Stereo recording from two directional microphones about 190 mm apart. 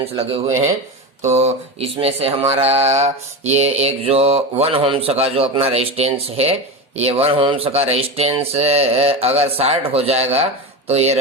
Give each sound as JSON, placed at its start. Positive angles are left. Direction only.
{"t": 0.0, "sound": "mantra", "side_deg": -30}